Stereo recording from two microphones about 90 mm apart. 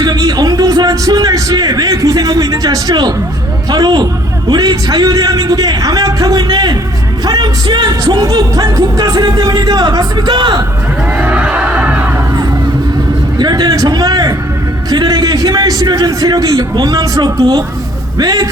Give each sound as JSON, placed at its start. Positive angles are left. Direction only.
{"t": 0.0, "sound": "a man's voice", "side_deg": -50}
{"t": 3.7, "sound": "music", "side_deg": -45}
{"t": 11.2, "sound": "crowd", "side_deg": -15}
{"t": 13.4, "sound": "a man's voice", "side_deg": -50}
{"t": 14.8, "sound": "music", "side_deg": -45}